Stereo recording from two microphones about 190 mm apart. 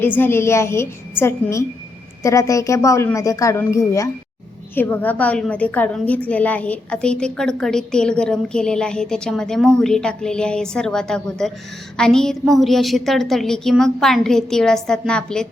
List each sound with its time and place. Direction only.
0.0 s a woman's voice: 10° left (ahead or behind)